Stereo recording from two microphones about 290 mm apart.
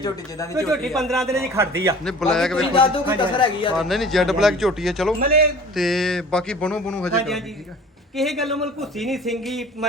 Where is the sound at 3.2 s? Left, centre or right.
Centre.